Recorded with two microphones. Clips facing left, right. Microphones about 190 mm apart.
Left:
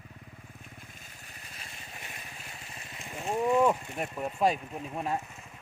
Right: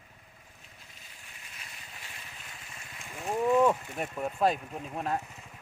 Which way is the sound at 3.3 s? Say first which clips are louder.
Right 1 dB; 15° left (ahead or behind).